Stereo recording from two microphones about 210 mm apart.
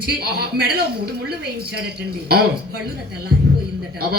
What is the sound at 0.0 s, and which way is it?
Speech, 50° right (ahead or behind).